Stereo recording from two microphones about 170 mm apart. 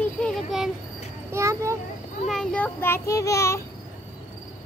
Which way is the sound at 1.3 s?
15° right (ahead or behind).